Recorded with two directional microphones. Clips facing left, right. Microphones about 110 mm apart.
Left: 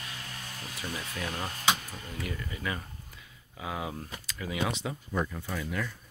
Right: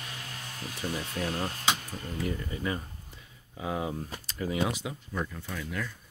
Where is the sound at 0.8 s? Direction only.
35° right (ahead or behind).